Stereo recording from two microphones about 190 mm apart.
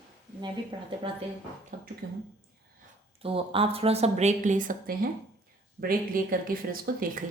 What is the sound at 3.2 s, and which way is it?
Speech, 30° right (ahead or behind).